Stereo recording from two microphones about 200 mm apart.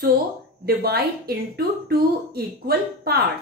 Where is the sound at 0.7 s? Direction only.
50° right (ahead or behind).